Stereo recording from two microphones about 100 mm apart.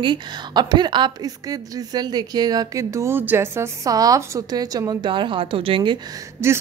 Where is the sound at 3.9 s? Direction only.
35° right (ahead or behind); by 6.0 s 60° right (ahead or behind).